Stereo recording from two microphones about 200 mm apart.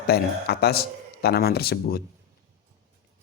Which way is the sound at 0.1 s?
50° left (ahead or behind).